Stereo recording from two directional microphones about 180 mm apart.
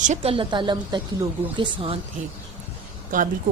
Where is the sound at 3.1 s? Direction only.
45° right (ahead or behind).